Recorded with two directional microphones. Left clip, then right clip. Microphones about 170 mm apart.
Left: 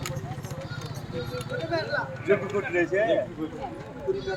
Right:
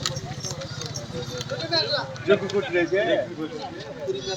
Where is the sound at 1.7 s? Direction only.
5° right (ahead or behind).